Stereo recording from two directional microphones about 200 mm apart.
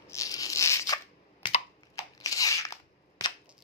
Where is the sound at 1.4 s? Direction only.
25° left (ahead or behind).